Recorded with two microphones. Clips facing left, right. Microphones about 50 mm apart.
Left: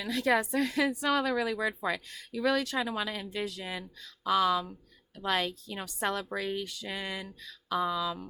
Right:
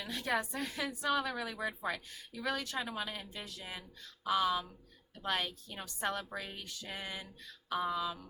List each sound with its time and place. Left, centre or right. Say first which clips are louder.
0.0 s a woman's voice: left 7 dB; left